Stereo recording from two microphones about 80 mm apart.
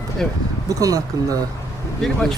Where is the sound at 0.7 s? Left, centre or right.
Right.